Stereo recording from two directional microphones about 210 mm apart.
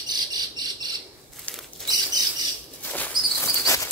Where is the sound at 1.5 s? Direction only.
5° left (ahead or behind).